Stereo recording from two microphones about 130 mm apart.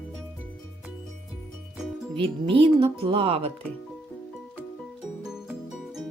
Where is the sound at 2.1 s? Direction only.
45° right (ahead or behind).